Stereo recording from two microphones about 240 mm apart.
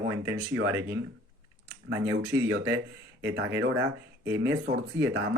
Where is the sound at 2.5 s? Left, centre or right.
Right.